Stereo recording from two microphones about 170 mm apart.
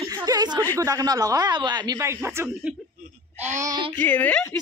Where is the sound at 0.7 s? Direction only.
20° right (ahead or behind).